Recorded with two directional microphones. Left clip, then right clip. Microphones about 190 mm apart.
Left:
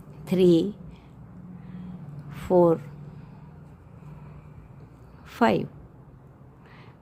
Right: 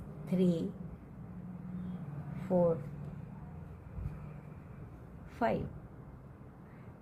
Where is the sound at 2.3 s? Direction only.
50° left (ahead or behind).